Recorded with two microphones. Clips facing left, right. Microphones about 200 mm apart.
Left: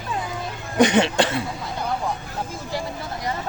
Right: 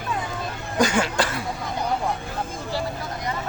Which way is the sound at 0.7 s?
25° left (ahead or behind).